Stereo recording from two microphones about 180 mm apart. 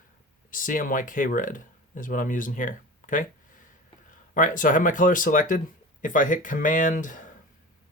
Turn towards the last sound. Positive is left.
turn(degrees=45)  # may be behind; listen again after turning